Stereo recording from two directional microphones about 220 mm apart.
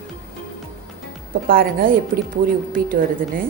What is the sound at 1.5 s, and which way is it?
A woman's voice, 40° right (ahead or behind).